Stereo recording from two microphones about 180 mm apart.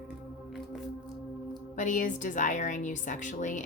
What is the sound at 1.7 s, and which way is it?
A woman's voice, 45° left (ahead or behind).